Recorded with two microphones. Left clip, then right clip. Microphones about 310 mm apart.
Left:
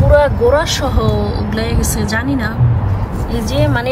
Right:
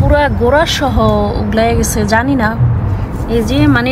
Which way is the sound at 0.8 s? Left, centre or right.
Centre.